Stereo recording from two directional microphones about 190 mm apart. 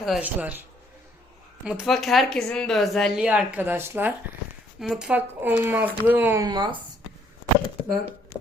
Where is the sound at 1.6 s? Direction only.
Centre (ahead or behind); by 6.8 s 25° right (ahead or behind).